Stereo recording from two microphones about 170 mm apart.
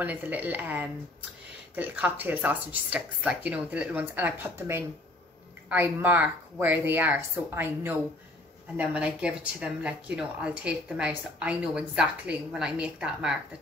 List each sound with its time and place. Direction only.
0.0 s speech: 10° right (ahead or behind)